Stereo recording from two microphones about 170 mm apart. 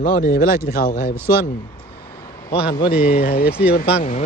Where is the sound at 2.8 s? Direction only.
30° left (ahead or behind).